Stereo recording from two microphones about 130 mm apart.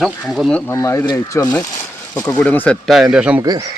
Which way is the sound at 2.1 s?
10° left (ahead or behind).